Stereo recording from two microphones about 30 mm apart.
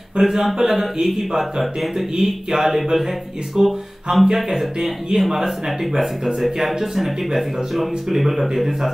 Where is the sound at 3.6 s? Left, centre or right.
Right.